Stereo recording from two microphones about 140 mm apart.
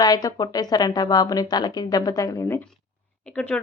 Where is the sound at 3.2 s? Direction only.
5° left (ahead or behind).